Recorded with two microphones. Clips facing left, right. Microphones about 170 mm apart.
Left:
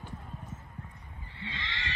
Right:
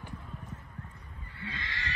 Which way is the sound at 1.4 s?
25° left (ahead or behind).